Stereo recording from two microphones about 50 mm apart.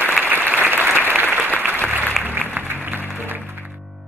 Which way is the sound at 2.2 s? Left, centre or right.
Right.